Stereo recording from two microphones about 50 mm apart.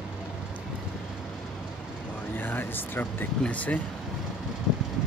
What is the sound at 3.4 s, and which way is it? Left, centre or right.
Speech, left.